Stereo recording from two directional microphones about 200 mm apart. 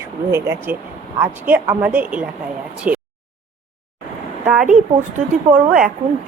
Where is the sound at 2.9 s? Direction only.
5° right (ahead or behind).